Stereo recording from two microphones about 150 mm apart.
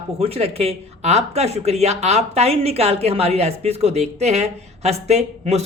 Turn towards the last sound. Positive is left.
turn(degrees=-45)  # may be behind; listen again after turning